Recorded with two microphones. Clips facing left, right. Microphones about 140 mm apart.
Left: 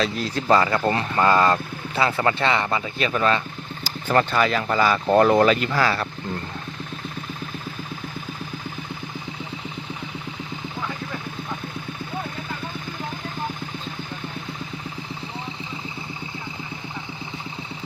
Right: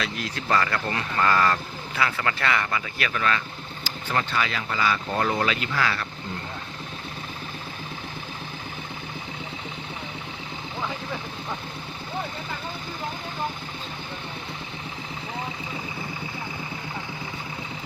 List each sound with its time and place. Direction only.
0.0 s speech: 30° left (ahead or behind)
3.8 s speech: 45° left (ahead or behind)